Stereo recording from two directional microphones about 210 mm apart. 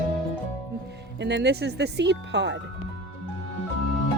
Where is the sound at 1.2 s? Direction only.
55° right (ahead or behind).